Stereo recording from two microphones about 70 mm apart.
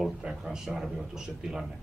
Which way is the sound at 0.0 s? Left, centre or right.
Centre.